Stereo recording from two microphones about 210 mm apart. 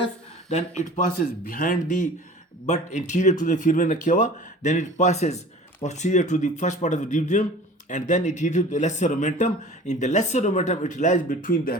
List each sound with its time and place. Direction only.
0.5 s speech: 35° left (ahead or behind)